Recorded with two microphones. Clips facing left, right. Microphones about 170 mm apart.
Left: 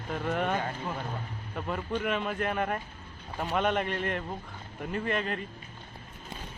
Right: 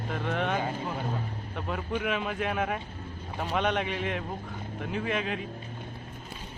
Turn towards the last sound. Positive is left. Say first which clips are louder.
# even
turn(degrees=-5)  # may be behind; listen again after turning